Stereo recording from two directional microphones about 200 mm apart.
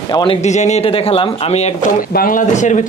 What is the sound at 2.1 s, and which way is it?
Speech, 45° left (ahead or behind).